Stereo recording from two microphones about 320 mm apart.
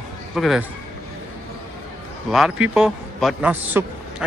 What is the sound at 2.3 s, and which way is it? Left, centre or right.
A man's voice, centre.